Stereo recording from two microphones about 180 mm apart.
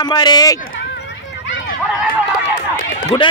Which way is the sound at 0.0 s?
25° left (ahead or behind).